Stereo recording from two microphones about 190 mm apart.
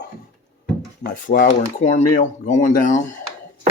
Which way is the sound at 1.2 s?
45° left (ahead or behind).